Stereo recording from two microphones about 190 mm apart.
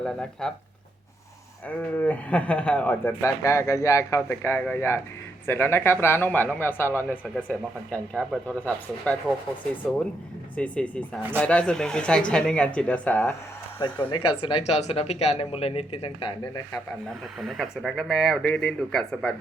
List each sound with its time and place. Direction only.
0.0 s speech: 5° left (ahead or behind)
1.6 s speech: 5° left (ahead or behind)
10.5 s speech: 5° left (ahead or behind)
14.1 s speech: 25° left (ahead or behind)
17.4 s speech: centre (ahead or behind)